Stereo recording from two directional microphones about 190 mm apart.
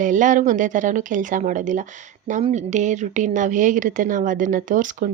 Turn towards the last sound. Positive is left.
turn(degrees=-45)  # may be behind; listen again after turning